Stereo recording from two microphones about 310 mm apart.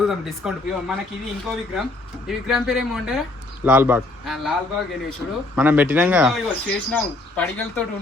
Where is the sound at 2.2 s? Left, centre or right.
Centre.